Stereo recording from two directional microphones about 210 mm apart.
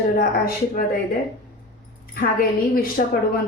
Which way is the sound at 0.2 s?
45° left (ahead or behind).